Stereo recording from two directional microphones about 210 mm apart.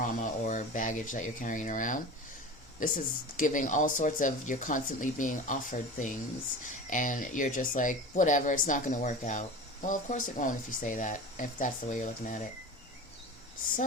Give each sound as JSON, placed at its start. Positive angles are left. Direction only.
{"t": 0.0, "sound": "speech", "side_deg": 35}